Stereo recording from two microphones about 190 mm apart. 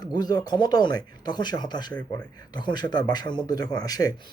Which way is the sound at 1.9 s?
5° left (ahead or behind).